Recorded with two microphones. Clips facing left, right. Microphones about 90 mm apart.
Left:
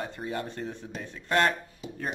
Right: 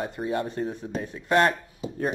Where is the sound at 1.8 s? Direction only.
35° right (ahead or behind).